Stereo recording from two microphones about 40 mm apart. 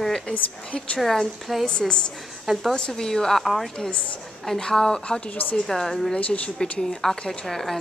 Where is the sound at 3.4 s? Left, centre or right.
Centre.